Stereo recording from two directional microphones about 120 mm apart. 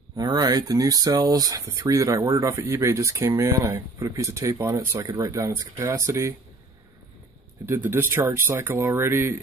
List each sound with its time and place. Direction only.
0.1 s speech: 35° right (ahead or behind)
7.6 s speech: 20° right (ahead or behind)